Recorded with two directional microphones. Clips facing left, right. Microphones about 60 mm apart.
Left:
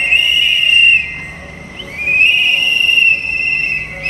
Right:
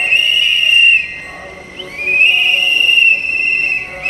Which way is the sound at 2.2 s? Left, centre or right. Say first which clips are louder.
Right 1 dB; centre.